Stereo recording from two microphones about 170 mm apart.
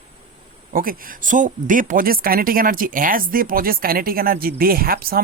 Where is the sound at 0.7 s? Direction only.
55° right (ahead or behind).